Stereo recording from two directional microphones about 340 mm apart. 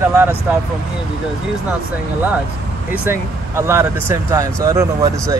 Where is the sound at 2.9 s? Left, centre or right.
Centre.